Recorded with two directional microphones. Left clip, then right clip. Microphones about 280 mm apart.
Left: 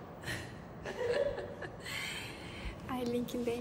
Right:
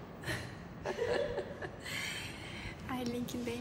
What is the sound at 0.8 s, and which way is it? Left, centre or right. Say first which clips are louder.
Chuckle: left 1 dB; centre.